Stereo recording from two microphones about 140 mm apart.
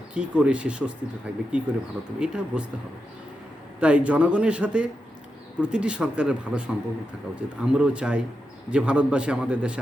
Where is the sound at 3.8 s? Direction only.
10° right (ahead or behind).